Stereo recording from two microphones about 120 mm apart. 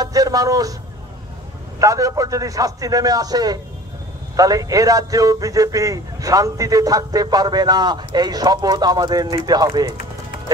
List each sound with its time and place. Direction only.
0.0 s a man's voice: 30° right (ahead or behind)
1.8 s a man's voice: 25° right (ahead or behind)